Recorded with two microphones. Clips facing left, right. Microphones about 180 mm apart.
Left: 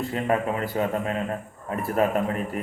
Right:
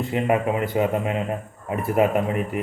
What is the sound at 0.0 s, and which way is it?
Speech, 15° right (ahead or behind).